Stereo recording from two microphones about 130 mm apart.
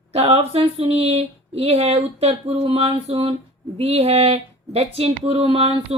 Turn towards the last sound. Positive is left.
turn(degrees=-45)  # may be behind; listen again after turning